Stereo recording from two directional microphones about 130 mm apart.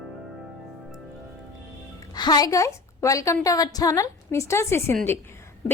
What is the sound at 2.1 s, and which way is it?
A woman's voice, 30° left (ahead or behind).